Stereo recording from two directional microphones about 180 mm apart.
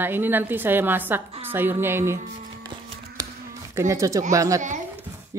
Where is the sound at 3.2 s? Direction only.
20° right (ahead or behind).